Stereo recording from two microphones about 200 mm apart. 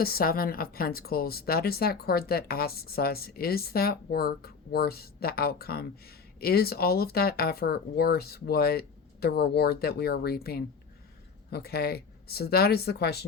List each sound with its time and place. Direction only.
0.0 s speech: 50° left (ahead or behind)